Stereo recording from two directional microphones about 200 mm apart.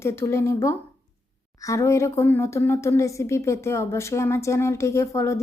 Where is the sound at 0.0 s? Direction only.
15° left (ahead or behind).